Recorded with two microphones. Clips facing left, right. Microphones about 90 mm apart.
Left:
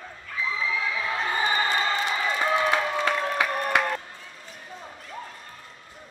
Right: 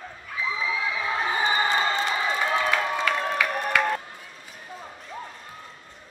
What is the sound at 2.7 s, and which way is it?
Music, 25° left (ahead or behind).